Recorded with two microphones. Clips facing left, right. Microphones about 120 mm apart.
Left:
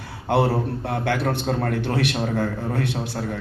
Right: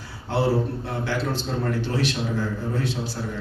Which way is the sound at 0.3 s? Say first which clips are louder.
Left 2 dB; 60° left (ahead or behind).